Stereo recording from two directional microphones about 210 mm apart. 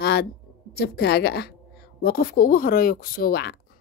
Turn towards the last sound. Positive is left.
turn(degrees=45)  # may be behind; listen again after turning